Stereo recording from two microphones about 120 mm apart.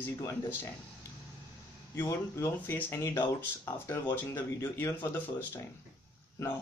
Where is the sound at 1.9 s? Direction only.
20° left (ahead or behind).